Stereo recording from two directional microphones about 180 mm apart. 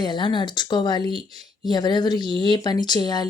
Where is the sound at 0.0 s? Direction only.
25° left (ahead or behind).